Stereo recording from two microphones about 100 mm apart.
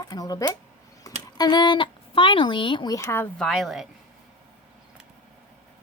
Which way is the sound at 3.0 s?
30° left (ahead or behind).